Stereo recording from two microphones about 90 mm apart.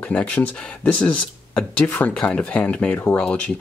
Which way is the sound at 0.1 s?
15° left (ahead or behind).